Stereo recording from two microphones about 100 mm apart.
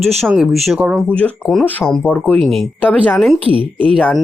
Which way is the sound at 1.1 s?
10° left (ahead or behind).